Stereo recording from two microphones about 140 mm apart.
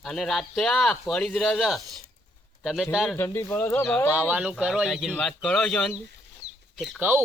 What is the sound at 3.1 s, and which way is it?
Speech, 15° left (ahead or behind).